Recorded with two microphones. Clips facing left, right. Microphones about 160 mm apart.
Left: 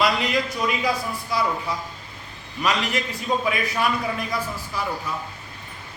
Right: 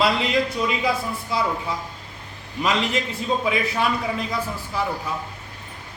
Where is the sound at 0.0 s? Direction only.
25° right (ahead or behind).